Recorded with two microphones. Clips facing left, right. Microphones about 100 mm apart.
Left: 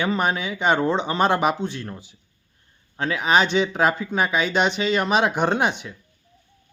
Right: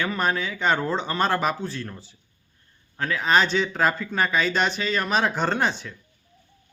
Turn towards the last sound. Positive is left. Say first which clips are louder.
# left 2 dB
turn(degrees=15)  # may be behind; listen again after turning